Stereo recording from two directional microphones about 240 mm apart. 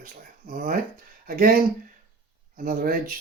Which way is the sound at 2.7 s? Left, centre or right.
Right.